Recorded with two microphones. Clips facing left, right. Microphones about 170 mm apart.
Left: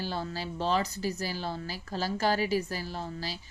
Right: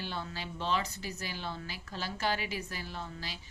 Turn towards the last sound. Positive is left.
turn(degrees=35)  # may be behind; listen again after turning